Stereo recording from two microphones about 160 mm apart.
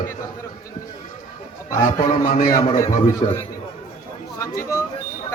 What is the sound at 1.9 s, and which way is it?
Speech, 55° left (ahead or behind).